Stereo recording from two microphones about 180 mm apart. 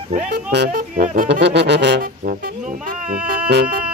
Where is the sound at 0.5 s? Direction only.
60° right (ahead or behind).